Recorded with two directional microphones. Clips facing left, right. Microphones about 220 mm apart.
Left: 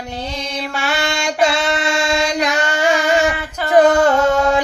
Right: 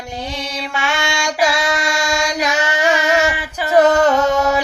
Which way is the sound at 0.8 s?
35° left (ahead or behind).